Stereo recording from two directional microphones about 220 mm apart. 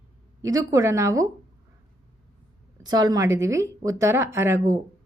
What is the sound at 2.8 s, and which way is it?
A woman's voice, 20° right (ahead or behind).